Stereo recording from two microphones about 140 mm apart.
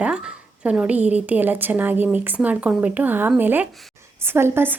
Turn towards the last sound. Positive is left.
turn(degrees=-15)  # may be behind; listen again after turning